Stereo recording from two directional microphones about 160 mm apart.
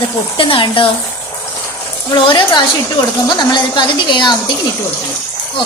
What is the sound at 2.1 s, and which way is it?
A woman's voice, 25° left (ahead or behind).